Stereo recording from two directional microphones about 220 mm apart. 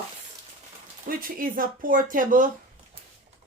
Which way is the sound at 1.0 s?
40° right (ahead or behind).